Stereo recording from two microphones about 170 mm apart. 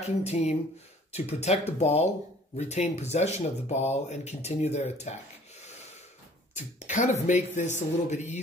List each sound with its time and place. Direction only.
0.0 s speech: 40° left (ahead or behind)